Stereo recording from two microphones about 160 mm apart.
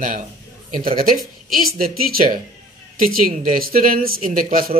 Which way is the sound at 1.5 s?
65° right (ahead or behind).